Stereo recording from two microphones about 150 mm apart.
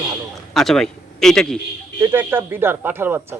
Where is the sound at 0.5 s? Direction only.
5° left (ahead or behind).